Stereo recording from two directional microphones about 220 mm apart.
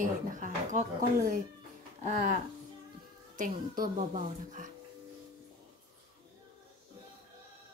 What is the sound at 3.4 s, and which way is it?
A woman's voice, 35° right (ahead or behind).